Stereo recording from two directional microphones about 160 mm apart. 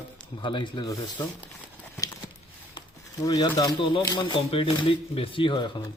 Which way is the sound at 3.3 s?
25° left (ahead or behind).